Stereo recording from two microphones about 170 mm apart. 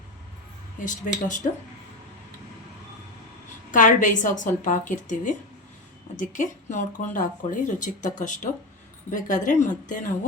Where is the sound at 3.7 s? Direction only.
50° left (ahead or behind).